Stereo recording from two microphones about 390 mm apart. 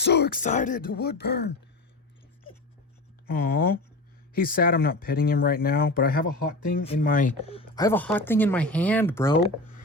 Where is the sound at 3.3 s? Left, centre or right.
Left; by 9.3 s centre.